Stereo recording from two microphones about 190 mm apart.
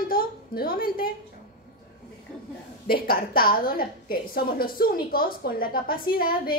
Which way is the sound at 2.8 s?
50° left (ahead or behind).